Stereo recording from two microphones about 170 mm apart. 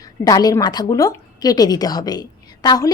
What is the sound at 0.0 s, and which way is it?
A woman's voice, 20° left (ahead or behind).